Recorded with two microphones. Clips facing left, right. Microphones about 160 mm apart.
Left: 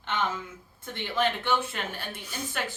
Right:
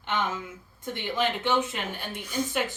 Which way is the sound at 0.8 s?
15° right (ahead or behind).